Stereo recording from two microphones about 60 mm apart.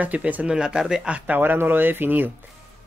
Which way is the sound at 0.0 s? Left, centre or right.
Right.